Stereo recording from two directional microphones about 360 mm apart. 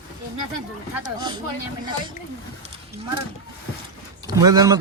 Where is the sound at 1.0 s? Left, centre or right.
Centre.